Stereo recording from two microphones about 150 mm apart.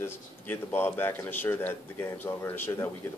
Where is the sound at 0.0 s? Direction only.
15° left (ahead or behind).